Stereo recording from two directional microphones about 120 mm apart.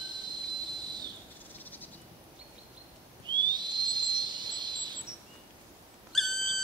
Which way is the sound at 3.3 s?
40° right (ahead or behind).